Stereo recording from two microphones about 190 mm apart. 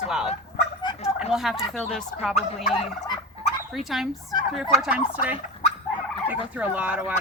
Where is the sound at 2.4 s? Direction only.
Centre (ahead or behind).